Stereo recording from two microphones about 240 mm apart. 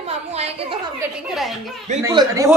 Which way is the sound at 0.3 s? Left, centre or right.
Right.